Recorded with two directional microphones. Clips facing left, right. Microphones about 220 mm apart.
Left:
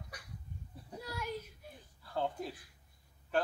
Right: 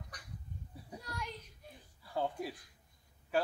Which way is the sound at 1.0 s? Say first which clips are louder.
Left 3 dB; 5° left (ahead or behind).